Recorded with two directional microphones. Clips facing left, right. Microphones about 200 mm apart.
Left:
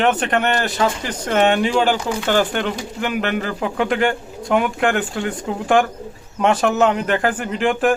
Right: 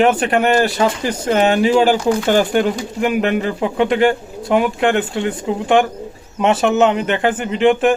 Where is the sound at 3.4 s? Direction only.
25° right (ahead or behind).